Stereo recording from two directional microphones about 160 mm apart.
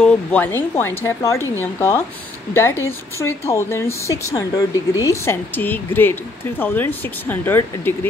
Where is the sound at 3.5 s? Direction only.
15° left (ahead or behind).